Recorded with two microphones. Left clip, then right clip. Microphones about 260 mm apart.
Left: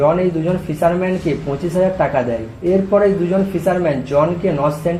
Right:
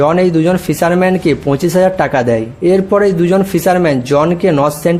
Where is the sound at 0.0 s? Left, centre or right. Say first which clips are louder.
Right 5 dB; right.